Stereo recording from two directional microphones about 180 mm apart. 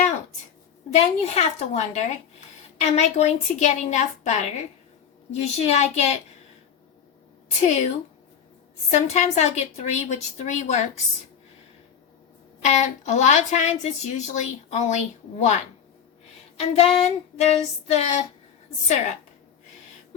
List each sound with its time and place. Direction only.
0.9 s speech: 40° left (ahead or behind)
7.6 s speech: 40° left (ahead or behind)
8.9 s speech: 40° left (ahead or behind)
12.6 s speech: 40° left (ahead or behind)
16.6 s speech: 35° left (ahead or behind)